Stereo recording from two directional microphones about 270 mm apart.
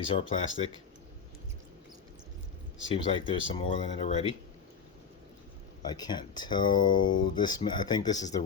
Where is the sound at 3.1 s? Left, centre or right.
Centre.